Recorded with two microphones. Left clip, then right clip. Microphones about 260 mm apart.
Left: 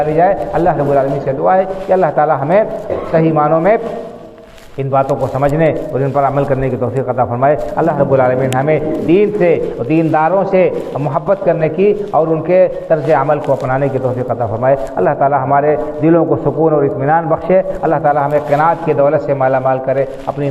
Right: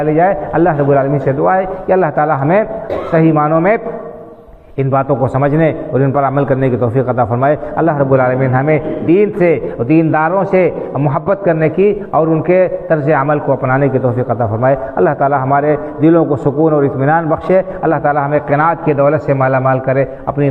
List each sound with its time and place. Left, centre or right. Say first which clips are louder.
0.0 s a man's voice: even; right
4.9 s a man's voice: even; right